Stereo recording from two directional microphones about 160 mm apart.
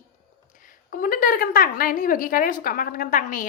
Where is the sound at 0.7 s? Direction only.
60° left (ahead or behind).